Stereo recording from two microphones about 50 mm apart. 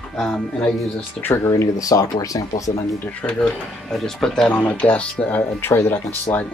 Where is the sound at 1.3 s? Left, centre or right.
Left.